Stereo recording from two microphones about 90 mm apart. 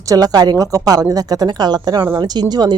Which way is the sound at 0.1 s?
45° right (ahead or behind).